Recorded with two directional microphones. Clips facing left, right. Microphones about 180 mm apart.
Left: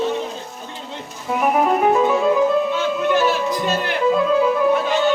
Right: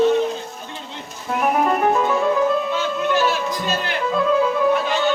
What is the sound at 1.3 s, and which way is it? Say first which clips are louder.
Music: left 1 dB; 5° left (ahead or behind).